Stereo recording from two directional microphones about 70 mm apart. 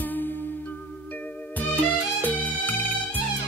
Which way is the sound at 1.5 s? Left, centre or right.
Left.